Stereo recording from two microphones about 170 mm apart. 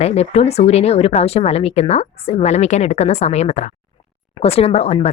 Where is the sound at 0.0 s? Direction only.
35° left (ahead or behind).